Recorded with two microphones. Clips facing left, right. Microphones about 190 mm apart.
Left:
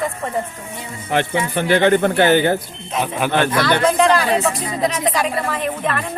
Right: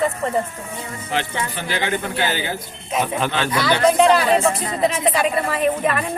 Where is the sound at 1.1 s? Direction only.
55° left (ahead or behind).